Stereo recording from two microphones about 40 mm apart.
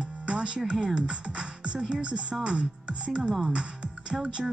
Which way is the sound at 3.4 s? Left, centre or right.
Right.